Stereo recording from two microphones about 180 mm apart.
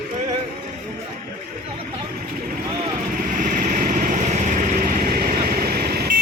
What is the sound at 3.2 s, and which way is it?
Vehicle, 50° right (ahead or behind).